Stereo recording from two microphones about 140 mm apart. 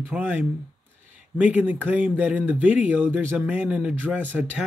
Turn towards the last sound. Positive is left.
turn(degrees=-10)  # may be behind; listen again after turning